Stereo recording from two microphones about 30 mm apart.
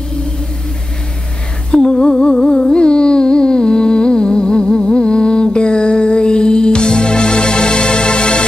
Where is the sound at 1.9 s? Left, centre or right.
Left.